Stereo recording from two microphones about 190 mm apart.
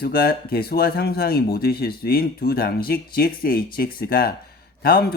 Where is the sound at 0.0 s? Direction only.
50° left (ahead or behind).